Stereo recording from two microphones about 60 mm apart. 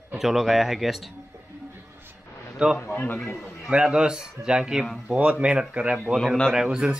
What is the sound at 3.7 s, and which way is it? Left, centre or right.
A man's voice, centre.